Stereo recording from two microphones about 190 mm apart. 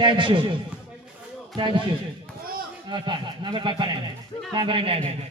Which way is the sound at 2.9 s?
25° right (ahead or behind).